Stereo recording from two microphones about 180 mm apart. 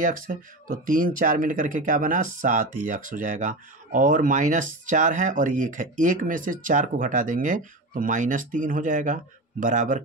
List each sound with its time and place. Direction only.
0.0 s speech: 50° right (ahead or behind)